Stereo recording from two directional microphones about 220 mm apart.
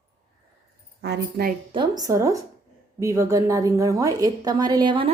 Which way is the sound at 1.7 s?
20° right (ahead or behind).